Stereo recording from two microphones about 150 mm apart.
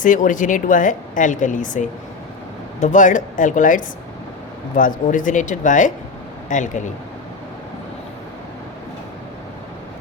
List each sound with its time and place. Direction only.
0.0 s speech: 60° left (ahead or behind)